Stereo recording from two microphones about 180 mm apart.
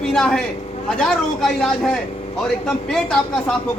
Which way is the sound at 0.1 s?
5° left (ahead or behind).